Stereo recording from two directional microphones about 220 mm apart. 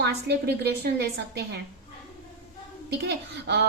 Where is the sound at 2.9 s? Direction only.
50° right (ahead or behind).